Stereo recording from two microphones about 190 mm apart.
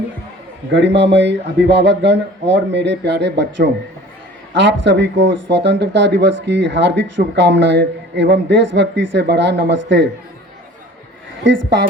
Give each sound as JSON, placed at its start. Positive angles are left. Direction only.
{"t": 0.7, "sound": "speech", "side_deg": -70}
{"t": 11.4, "sound": "speech", "side_deg": -75}